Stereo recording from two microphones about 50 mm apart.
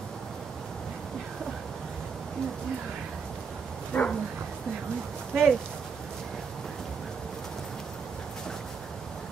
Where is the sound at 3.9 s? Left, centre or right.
Left.